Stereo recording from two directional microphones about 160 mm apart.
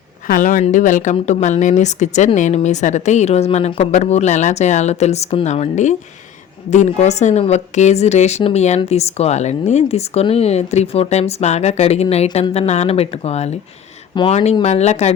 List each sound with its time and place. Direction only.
0.3 s a woman's voice: 55° left (ahead or behind)